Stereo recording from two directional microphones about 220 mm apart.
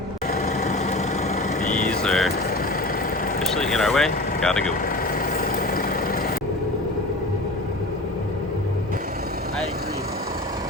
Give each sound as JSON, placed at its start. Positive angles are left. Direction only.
{"t": 0.6, "sound": "vehicle", "side_deg": 30}
{"t": 1.9, "sound": "vehicle", "side_deg": 5}
{"t": 3.5, "sound": "speech", "side_deg": 0}